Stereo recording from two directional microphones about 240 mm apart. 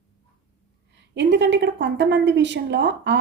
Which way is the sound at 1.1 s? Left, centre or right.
Right.